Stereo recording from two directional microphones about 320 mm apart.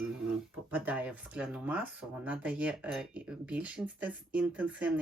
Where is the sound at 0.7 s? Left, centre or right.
Centre.